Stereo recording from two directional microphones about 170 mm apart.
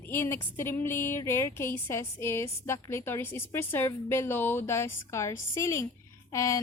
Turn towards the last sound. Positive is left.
turn(degrees=20)  # may be behind; listen again after turning